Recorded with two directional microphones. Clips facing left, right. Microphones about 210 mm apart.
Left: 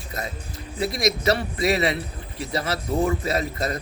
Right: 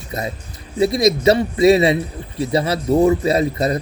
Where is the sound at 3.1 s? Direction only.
25° right (ahead or behind).